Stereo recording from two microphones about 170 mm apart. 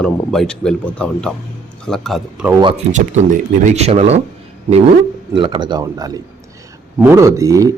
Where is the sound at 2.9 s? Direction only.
45° right (ahead or behind).